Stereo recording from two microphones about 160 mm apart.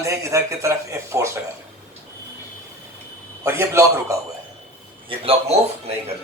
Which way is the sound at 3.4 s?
15° right (ahead or behind).